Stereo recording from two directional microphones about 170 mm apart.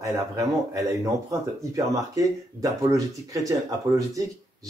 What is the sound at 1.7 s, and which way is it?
Speech, 20° right (ahead or behind).